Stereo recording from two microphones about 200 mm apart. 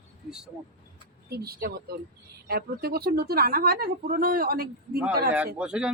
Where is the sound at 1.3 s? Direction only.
50° right (ahead or behind).